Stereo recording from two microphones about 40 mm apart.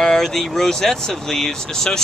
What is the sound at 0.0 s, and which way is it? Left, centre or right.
Speech, centre.